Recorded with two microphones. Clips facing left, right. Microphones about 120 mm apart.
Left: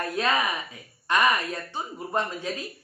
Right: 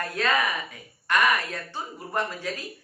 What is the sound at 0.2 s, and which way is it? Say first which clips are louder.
Speech: right 1 dB; 20° left (ahead or behind).